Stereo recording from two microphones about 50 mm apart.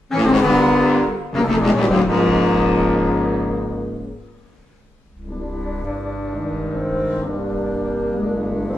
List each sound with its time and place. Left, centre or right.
0.1 s brass instrument: centre
2.8 s music: centre
5.3 s music: centre